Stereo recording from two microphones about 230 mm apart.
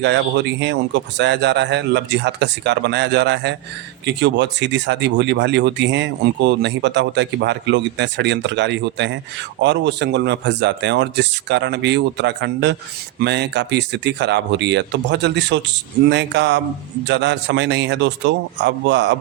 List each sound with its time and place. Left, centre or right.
0.0 s speech: right